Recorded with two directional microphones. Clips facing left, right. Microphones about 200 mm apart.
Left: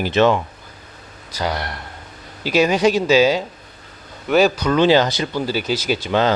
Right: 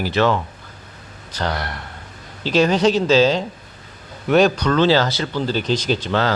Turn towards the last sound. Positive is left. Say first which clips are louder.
# left 1 dB
turn(degrees=10)  # may be behind; listen again after turning